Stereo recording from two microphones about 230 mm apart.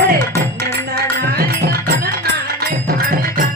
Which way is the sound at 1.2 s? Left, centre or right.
Right.